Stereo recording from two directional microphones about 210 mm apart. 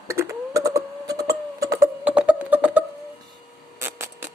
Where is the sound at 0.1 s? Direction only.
15° right (ahead or behind).